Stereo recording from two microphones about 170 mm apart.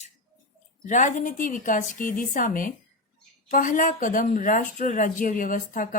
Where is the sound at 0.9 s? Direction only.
50° left (ahead or behind).